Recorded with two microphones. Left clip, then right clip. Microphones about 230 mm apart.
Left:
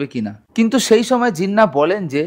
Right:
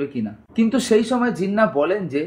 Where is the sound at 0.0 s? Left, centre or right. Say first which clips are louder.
Left 2 dB; left.